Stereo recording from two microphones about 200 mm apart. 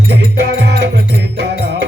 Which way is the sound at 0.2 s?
55° right (ahead or behind).